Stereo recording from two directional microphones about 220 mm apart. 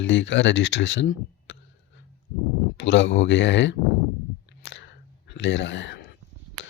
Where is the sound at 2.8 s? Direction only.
55° left (ahead or behind).